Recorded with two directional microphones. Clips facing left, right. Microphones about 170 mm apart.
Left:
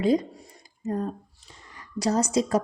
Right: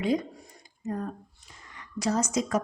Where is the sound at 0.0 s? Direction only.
35° left (ahead or behind).